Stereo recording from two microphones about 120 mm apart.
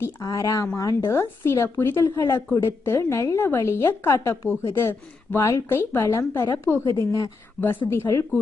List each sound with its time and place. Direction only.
0.0 s a woman's voice: 25° left (ahead or behind)